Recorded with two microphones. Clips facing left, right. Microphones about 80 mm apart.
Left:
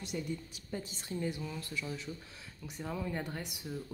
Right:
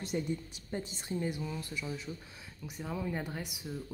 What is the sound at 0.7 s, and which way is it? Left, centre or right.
A woman's voice, right.